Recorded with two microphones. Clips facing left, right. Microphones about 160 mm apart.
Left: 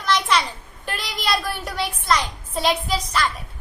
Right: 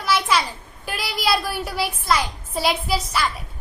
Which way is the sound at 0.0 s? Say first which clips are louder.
Even; 5° right (ahead or behind).